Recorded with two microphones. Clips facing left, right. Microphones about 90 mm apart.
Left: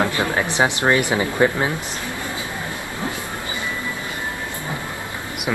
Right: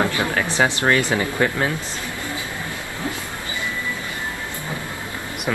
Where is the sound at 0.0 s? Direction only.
20° left (ahead or behind).